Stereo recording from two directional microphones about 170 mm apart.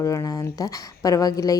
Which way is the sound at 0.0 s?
20° left (ahead or behind).